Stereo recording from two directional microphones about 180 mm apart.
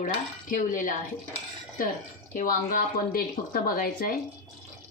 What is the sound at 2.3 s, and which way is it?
Speech, 50° left (ahead or behind).